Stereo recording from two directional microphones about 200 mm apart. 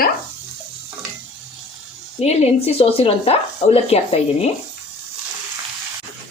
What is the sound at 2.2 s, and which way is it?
Speech, 30° left (ahead or behind).